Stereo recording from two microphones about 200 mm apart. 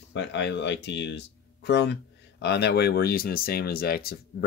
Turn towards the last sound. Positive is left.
turn(degrees=50)  # may be behind; listen again after turning